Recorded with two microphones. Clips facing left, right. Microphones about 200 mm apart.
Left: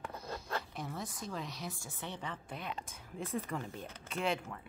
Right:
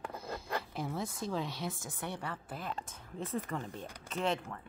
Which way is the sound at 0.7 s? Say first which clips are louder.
Right 5 dB; 30° right (ahead or behind).